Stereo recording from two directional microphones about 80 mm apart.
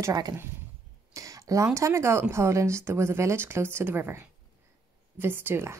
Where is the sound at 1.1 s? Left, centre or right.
Right.